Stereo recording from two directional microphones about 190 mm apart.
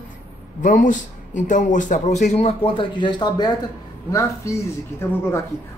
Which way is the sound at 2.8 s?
25° left (ahead or behind).